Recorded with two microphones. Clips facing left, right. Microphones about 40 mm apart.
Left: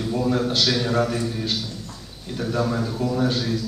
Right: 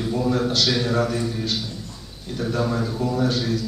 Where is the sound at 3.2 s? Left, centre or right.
Left.